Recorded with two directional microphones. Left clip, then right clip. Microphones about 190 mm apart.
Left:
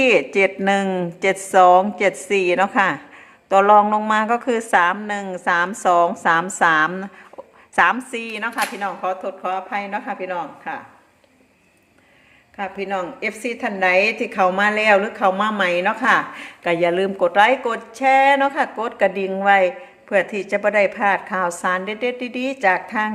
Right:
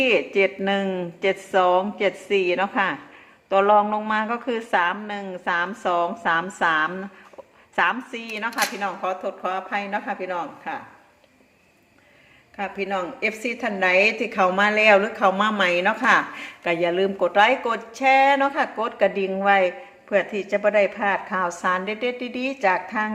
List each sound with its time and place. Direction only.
0.0 s a woman's voice: 25° left (ahead or behind); by 10.8 s 5° left (ahead or behind)
12.5 s a woman's voice: 10° left (ahead or behind)